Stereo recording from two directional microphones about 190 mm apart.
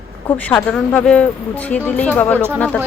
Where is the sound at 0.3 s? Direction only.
10° left (ahead or behind).